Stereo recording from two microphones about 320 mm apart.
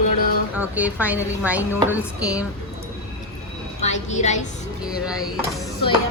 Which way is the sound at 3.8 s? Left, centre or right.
Left.